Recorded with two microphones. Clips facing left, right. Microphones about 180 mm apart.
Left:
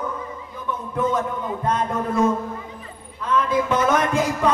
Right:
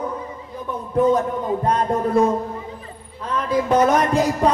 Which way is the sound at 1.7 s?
35° right (ahead or behind).